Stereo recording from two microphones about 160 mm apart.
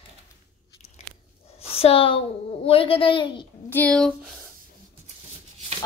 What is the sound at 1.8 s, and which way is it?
A child's voice, 35° left (ahead or behind).